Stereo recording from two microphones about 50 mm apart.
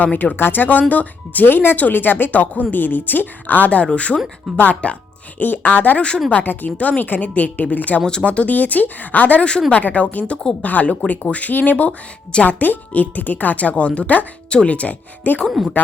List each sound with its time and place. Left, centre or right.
0.0 s speech: left
0.3 s speech: left
5.4 s speech: left
6.7 s speech: left
9.5 s speech: centre
9.7 s speech: left
15.6 s speech: centre